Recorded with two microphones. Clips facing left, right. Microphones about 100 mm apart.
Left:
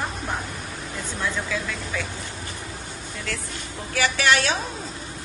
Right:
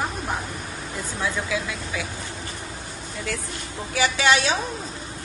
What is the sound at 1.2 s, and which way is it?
Speech, 10° right (ahead or behind).